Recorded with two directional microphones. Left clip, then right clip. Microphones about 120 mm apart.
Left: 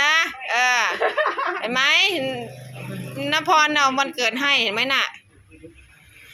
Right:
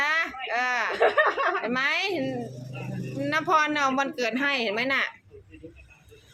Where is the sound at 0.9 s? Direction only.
25° right (ahead or behind).